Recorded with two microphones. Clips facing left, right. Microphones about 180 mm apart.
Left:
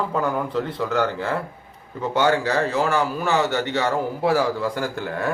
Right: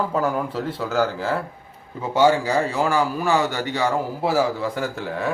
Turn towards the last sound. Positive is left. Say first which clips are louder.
# even
turn(degrees=0)  # may be behind; listen again after turning